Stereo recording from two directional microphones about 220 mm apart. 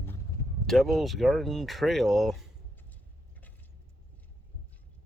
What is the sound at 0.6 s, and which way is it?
Speech, centre (ahead or behind).